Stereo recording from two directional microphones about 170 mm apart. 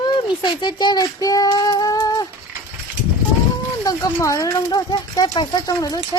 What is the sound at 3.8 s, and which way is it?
Speech, 20° left (ahead or behind).